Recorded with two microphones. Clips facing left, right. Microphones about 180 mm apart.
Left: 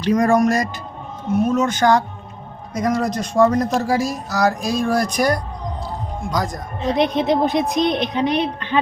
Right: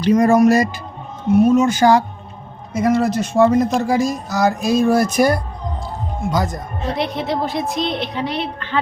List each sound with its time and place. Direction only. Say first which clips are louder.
0.0 s speech: right 3 dB; 5° right (ahead or behind)
6.8 s a woman's voice: left 5 dB; 20° left (ahead or behind)